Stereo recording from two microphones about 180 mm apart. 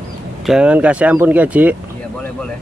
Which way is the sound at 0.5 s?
5° right (ahead or behind).